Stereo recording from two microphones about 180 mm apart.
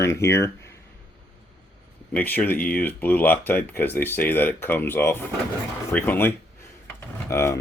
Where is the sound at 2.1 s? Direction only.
10° left (ahead or behind).